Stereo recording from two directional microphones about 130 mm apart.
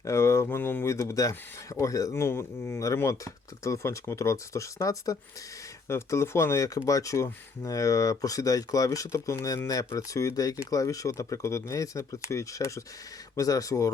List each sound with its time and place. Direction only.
0.0 s speech: 20° left (ahead or behind)